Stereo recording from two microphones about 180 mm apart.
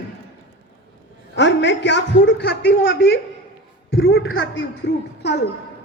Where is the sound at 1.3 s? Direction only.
80° left.